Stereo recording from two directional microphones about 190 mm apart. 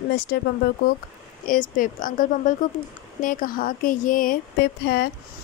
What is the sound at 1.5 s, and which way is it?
A woman's voice, 45° left (ahead or behind).